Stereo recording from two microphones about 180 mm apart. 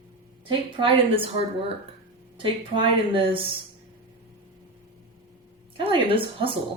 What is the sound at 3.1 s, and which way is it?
Speech, 30° right (ahead or behind).